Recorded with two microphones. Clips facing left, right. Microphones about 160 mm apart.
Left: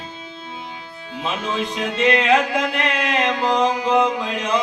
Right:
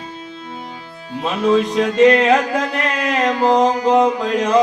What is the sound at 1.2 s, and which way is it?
Music, 35° right (ahead or behind).